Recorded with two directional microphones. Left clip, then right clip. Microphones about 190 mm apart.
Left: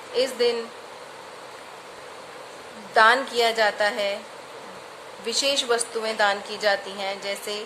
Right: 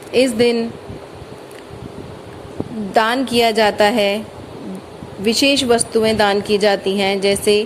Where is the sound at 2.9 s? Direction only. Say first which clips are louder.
Right 2 dB; 30° right (ahead or behind).